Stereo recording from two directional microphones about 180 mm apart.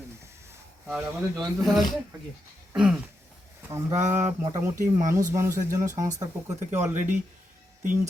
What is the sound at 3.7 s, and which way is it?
Speech, 15° right (ahead or behind).